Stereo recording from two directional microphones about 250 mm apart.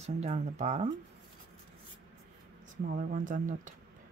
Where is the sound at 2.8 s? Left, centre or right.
Right.